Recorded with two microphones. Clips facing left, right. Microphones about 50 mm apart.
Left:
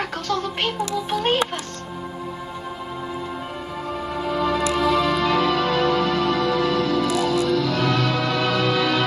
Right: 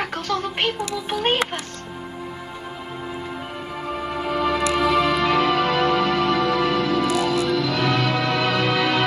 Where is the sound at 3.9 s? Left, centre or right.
Right.